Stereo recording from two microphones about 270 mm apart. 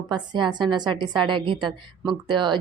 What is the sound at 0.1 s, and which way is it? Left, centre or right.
A woman's voice, centre.